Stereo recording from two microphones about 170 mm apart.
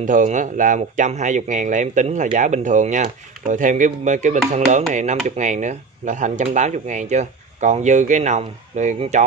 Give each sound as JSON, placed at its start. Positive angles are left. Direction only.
{"t": 0.0, "sound": "speech", "side_deg": -50}